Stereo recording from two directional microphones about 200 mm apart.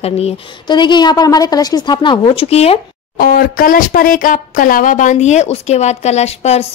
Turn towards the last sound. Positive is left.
turn(degrees=30)  # may be behind; listen again after turning